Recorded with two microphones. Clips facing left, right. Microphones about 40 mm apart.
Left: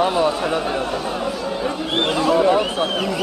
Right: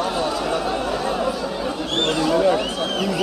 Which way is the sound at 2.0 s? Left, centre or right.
Centre.